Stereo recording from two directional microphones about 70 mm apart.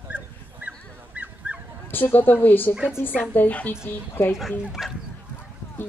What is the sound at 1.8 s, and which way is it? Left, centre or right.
Speech, left.